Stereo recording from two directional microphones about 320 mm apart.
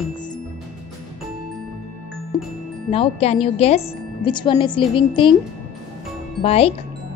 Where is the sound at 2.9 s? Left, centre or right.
Centre.